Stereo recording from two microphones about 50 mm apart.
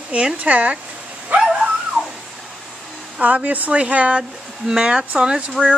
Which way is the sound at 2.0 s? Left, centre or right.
Centre.